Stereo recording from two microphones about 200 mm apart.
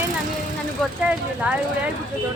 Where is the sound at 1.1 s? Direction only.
5° right (ahead or behind).